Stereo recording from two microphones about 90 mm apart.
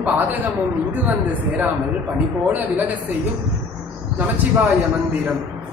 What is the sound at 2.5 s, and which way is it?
Speech, 20° right (ahead or behind).